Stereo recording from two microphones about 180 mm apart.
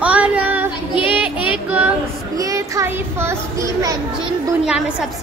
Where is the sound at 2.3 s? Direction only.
20° right (ahead or behind).